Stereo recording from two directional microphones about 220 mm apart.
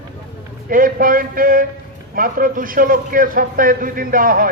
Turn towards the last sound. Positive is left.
turn(degrees=-40)  # may be behind; listen again after turning